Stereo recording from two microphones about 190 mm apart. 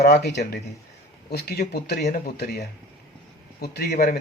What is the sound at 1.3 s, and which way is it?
A man's voice, 55° left (ahead or behind).